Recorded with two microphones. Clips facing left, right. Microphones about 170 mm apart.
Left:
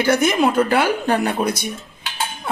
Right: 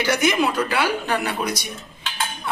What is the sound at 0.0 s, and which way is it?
Speech, 50° left (ahead or behind).